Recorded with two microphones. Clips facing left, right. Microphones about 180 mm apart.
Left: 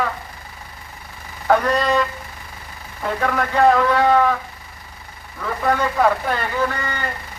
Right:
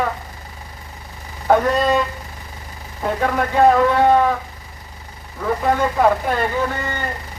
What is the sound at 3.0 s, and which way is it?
A man's voice, 20° right (ahead or behind).